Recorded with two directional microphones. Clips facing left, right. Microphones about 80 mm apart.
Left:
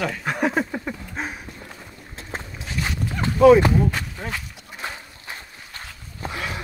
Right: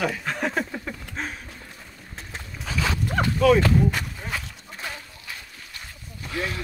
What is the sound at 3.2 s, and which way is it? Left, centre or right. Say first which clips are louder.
Clip-clop: left 6 dB; left.